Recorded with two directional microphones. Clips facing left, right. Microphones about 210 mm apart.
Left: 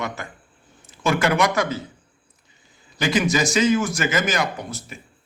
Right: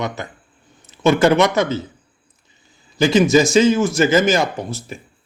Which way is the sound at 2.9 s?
25° right (ahead or behind).